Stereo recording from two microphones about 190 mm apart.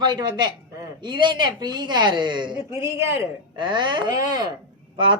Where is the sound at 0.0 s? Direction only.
25° right (ahead or behind).